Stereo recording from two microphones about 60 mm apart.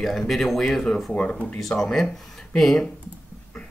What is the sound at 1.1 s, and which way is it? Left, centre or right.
Speech, centre.